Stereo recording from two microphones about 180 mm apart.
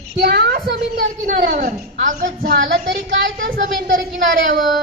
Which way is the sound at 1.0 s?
45° right (ahead or behind).